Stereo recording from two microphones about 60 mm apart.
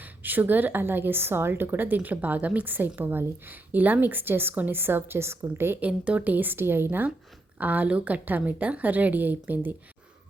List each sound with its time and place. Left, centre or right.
0.0 s a woman's voice: right
5.8 s a woman's voice: right